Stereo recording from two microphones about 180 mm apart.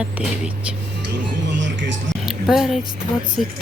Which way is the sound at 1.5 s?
85° right.